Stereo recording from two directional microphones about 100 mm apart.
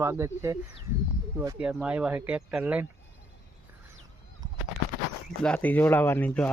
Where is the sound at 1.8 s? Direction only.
10° right (ahead or behind).